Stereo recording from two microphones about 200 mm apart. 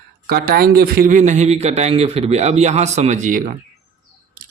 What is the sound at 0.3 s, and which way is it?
A man's voice, 50° right (ahead or behind).